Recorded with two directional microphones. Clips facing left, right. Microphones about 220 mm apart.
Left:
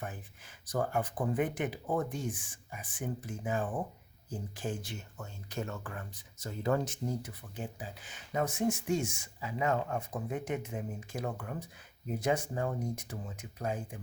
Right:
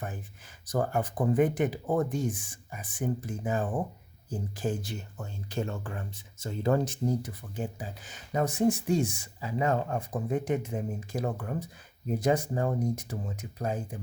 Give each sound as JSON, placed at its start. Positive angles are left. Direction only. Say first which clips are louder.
{"t": 0.7, "sound": "speech", "louder": "right 3 dB", "side_deg": -40}